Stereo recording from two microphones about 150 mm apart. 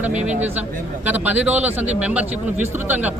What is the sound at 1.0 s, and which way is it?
Speech, 10° right (ahead or behind).